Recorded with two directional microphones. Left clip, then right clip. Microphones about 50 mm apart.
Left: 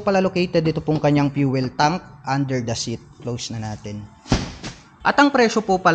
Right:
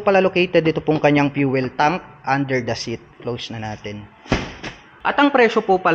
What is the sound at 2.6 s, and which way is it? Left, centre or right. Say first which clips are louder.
A man's voice: right 2 dB; centre.